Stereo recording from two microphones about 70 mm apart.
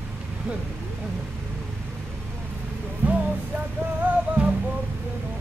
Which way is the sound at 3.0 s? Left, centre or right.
Right.